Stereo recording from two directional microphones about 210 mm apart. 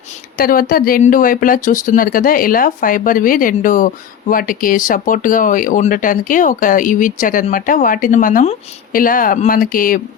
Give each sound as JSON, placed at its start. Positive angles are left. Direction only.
{"t": 0.3, "sound": "speech", "side_deg": 45}